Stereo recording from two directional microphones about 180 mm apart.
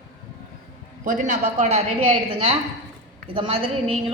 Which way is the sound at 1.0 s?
45° right (ahead or behind).